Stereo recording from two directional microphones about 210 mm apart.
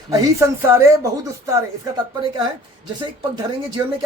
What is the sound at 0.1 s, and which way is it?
Speech, 15° right (ahead or behind).